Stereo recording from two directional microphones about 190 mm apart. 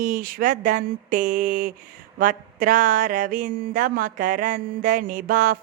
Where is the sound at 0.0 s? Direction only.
45° right (ahead or behind).